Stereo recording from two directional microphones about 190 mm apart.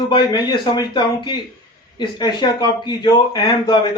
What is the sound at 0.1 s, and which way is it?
Speech, 25° left (ahead or behind).